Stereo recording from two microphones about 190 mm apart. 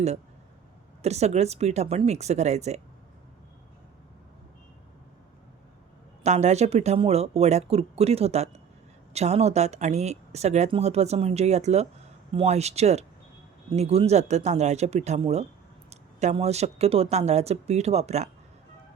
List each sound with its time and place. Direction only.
1.0 s speech: 35° right (ahead or behind)
6.2 s speech: 35° right (ahead or behind)